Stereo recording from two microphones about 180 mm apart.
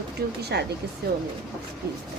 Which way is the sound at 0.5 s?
65° right (ahead or behind).